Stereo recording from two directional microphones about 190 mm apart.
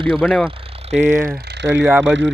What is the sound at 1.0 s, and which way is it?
Speech, 45° right (ahead or behind).